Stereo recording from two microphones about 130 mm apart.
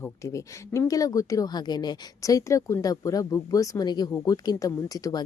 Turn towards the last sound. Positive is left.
turn(degrees=25)  # may be behind; listen again after turning